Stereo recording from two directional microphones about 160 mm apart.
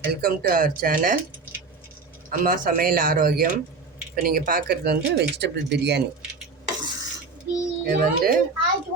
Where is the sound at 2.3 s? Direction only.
60° right (ahead or behind); by 6.0 s 90° right.